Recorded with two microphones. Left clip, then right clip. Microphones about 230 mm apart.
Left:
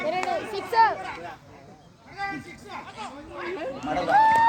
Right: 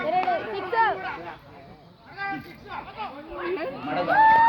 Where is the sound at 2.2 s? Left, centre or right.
Left.